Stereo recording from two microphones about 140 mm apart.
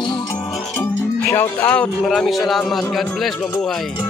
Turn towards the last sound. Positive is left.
turn(degrees=0)  # may be behind; listen again after turning